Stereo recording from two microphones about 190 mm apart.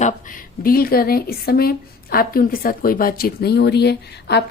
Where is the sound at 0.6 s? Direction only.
50° left (ahead or behind).